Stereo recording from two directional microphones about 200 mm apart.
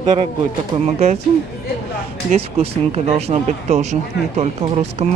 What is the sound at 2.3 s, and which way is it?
Speech, 30° right (ahead or behind).